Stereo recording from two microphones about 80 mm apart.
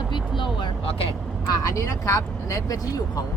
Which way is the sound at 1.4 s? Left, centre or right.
Left.